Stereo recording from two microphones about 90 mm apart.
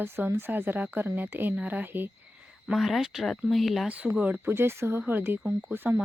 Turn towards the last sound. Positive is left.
turn(degrees=-20)  # may be behind; listen again after turning